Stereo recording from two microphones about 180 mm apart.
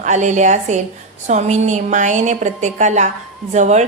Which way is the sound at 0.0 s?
40° right (ahead or behind).